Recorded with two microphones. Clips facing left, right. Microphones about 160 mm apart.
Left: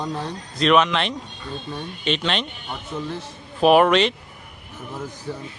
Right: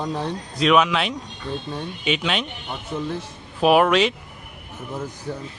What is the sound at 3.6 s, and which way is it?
Speech, centre (ahead or behind).